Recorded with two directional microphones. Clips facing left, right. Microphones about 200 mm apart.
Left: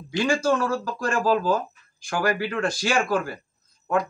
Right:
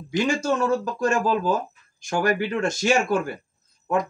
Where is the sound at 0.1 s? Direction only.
20° right (ahead or behind).